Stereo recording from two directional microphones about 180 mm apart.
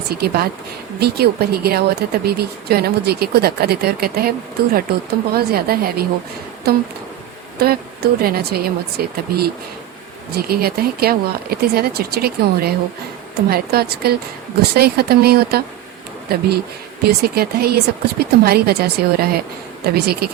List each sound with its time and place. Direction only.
0.1 s speech: 60° right (ahead or behind)
7.6 s speech: 60° right (ahead or behind)